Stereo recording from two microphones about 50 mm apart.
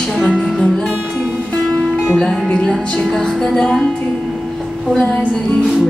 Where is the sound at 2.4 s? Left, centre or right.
Centre.